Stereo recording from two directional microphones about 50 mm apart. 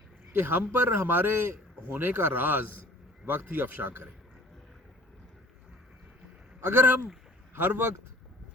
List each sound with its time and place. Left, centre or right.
0.3 s a man's voice: right
6.6 s a man's voice: right